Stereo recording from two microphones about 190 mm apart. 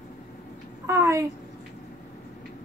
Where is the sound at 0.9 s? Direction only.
15° right (ahead or behind).